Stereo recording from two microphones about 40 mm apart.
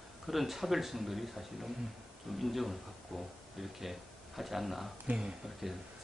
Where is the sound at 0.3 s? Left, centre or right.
Centre.